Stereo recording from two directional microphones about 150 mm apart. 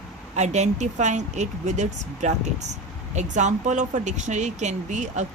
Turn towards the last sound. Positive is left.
turn(degrees=-50)  # may be behind; listen again after turning